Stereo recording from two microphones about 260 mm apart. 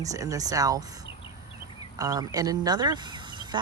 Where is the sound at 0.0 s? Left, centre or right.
Centre.